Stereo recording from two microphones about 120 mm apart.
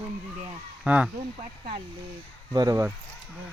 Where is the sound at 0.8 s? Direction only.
10° right (ahead or behind).